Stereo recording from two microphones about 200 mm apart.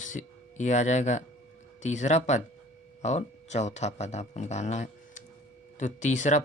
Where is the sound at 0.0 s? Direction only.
40° left (ahead or behind).